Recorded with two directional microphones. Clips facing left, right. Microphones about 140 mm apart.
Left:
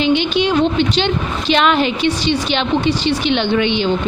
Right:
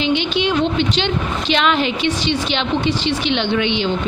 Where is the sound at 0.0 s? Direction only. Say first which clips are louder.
Left 3 dB; 50° left (ahead or behind).